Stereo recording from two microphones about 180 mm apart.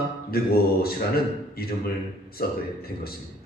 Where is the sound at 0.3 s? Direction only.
60° left (ahead or behind).